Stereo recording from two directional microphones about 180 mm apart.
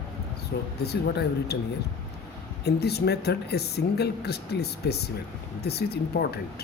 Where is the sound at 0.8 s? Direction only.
65° left (ahead or behind).